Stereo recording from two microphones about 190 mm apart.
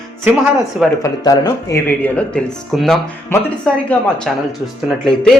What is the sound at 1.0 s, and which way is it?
Speech, 20° left (ahead or behind).